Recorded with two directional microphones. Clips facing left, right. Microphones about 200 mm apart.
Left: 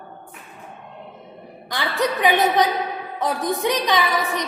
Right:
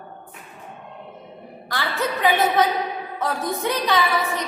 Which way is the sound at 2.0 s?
15° left (ahead or behind).